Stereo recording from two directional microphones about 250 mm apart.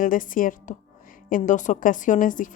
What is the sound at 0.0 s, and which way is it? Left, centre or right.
A woman's voice, left.